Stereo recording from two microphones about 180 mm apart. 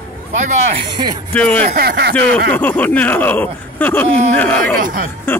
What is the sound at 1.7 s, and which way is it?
Speech, 60° right (ahead or behind).